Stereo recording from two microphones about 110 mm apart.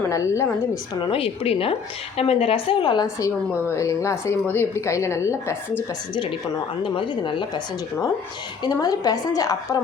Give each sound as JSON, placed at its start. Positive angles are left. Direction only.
{"t": 0.1, "sound": "speech", "side_deg": 25}
{"t": 1.1, "sound": "a woman's voice", "side_deg": 60}
{"t": 2.8, "sound": "a woman's voice", "side_deg": 40}
{"t": 3.2, "sound": "speech", "side_deg": 25}
{"t": 6.8, "sound": "a woman's voice", "side_deg": 50}
{"t": 8.6, "sound": "a woman's voice", "side_deg": 35}